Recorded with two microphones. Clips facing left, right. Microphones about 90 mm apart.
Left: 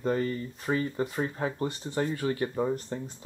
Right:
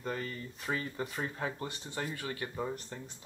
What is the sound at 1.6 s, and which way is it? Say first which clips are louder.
Speech: left 9 dB; 30° left (ahead or behind).